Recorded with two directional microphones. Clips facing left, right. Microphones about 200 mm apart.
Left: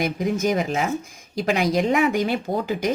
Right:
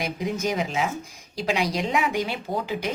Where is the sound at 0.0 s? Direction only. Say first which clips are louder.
Left 5 dB; 50° left (ahead or behind).